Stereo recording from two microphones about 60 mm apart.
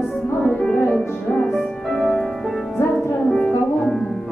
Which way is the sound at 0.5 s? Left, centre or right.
Centre.